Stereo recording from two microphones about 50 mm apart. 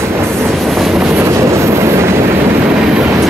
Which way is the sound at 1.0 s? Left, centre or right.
Right.